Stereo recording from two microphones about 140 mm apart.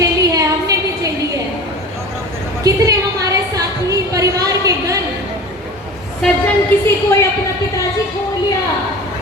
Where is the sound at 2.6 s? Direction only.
25° right (ahead or behind).